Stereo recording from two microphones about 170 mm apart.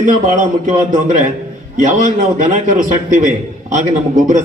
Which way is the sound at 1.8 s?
50° right (ahead or behind).